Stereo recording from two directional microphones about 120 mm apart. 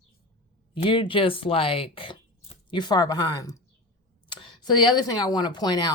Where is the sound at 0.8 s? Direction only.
45° left (ahead or behind).